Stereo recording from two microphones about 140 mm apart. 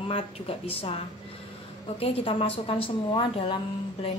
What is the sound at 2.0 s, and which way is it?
A woman's voice, 45° left (ahead or behind).